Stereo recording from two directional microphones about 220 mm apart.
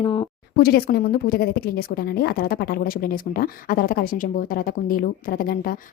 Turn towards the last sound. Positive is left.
turn(degrees=40)  # may be behind; listen again after turning